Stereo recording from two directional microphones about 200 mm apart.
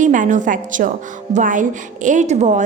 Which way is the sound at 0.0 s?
40° right (ahead or behind).